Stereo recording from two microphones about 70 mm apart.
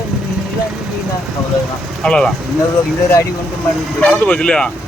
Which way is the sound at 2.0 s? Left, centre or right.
Centre.